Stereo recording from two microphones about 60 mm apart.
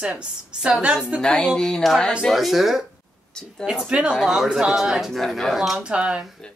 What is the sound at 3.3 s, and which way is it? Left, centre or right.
Speech, centre.